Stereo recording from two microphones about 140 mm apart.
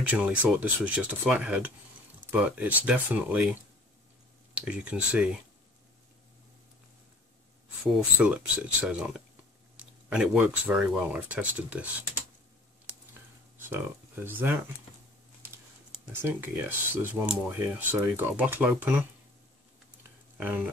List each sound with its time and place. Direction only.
0.1 s speech: 10° right (ahead or behind)
4.6 s speech: 10° right (ahead or behind)
7.9 s speech: 5° right (ahead or behind)
13.6 s speech: 15° right (ahead or behind)
16.2 s speech: 15° right (ahead or behind)
20.3 s speech: 15° right (ahead or behind)